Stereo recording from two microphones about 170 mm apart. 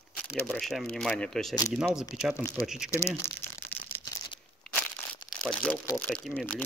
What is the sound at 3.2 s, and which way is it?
Crumpling, 15° left (ahead or behind).